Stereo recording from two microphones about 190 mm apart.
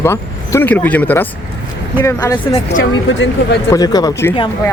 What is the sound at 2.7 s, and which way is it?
Speech, 85° left.